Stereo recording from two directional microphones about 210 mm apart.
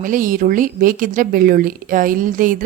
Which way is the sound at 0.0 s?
40° right (ahead or behind).